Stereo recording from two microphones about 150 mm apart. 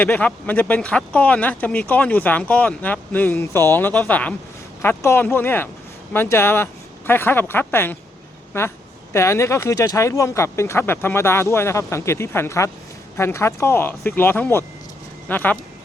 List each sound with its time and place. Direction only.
0.0 s speech: 10° left (ahead or behind)